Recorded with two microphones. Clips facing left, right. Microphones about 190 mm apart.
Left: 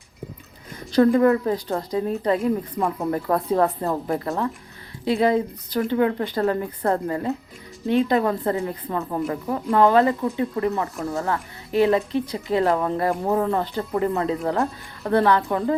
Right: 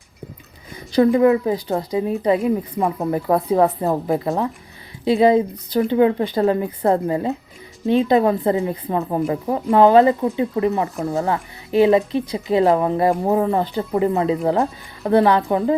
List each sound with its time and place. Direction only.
0.9 s a woman's voice: 5° right (ahead or behind)
2.4 s speech: centre (ahead or behind)
3.0 s a woman's voice: 10° right (ahead or behind)